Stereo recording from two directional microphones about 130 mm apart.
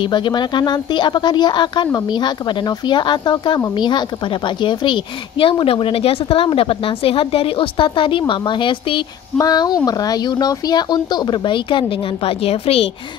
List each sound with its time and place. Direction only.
0.0 s speech: 35° left (ahead or behind)
12.3 s a woman's voice: 50° left (ahead or behind)